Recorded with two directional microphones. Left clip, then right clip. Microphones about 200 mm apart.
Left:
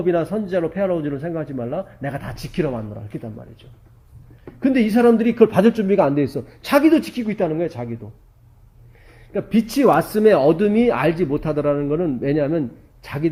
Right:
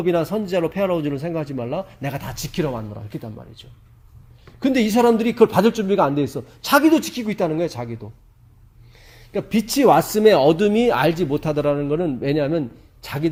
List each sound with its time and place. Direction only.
0.0 s a man's voice: 35° right (ahead or behind)
4.6 s a man's voice: 30° right (ahead or behind)
9.3 s speech: 30° right (ahead or behind)